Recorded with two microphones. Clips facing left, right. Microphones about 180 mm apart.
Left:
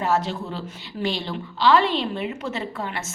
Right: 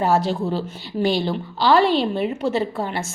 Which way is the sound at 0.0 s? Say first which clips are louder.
Right 4 dB; 35° right (ahead or behind).